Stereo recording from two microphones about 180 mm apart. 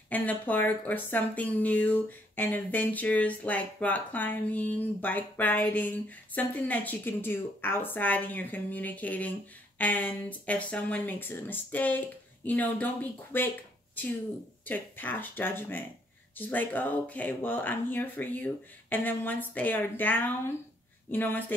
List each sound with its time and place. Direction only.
0.1 s speech: 10° left (ahead or behind)